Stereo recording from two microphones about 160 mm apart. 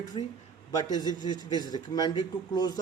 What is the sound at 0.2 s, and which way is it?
A man's voice, 30° left (ahead or behind).